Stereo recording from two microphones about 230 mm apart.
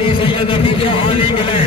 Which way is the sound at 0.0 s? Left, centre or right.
Left.